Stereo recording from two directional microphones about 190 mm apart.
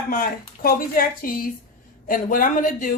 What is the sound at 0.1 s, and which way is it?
A woman's voice, 50° left (ahead or behind).